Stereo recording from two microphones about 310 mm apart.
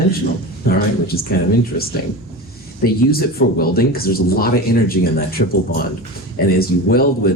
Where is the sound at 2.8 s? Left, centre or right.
Left.